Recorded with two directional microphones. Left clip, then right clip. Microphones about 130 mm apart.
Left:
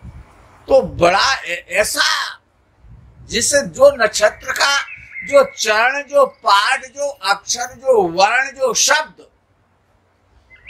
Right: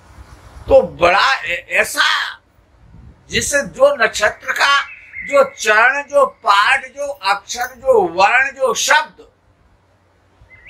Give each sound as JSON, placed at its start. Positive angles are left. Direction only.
{"t": 0.7, "sound": "speech", "side_deg": 50}
{"t": 6.5, "sound": "speech", "side_deg": 50}